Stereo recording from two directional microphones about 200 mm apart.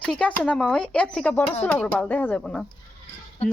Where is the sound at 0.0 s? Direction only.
5° left (ahead or behind).